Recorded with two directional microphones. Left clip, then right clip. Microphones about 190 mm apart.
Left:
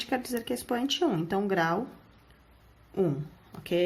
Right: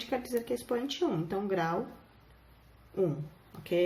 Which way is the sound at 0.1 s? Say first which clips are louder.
Even; 45° left (ahead or behind).